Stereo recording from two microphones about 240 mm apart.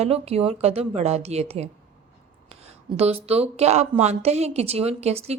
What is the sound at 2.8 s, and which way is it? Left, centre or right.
A woman's voice, right.